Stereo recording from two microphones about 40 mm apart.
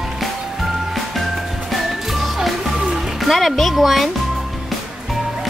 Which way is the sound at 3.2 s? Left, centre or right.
Centre.